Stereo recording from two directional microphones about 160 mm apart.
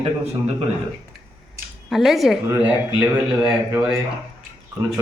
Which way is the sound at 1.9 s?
Centre (ahead or behind).